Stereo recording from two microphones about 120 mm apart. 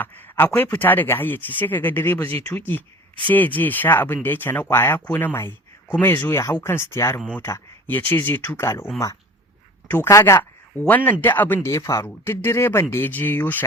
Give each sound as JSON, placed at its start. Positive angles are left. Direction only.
{"t": 0.0, "sound": "speech", "side_deg": 15}
{"t": 9.9, "sound": "speech", "side_deg": 25}
{"t": 10.8, "sound": "speech", "side_deg": 15}